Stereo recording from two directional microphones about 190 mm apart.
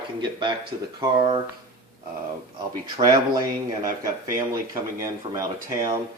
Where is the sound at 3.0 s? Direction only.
20° right (ahead or behind).